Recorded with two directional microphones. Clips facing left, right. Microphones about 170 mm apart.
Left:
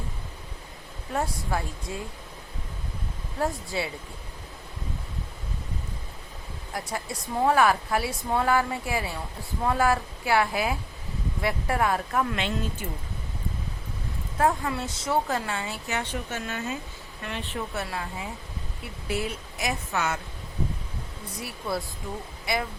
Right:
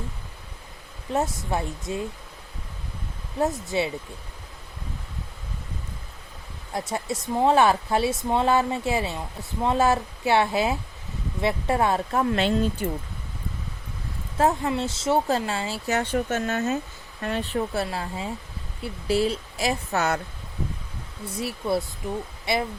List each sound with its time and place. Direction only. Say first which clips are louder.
1.1 s speech: right 3 dB; 20° right (ahead or behind)
3.3 s speech: right 4 dB; 20° right (ahead or behind)
6.7 s speech: right 5 dB; 25° right (ahead or behind)
14.3 s speech: right 3 dB; 25° right (ahead or behind)
16.0 s speech: right 9 dB; 45° right (ahead or behind)
17.7 s speech: right 4 dB; 30° right (ahead or behind)
21.4 s speech: right 6 dB; 25° right (ahead or behind)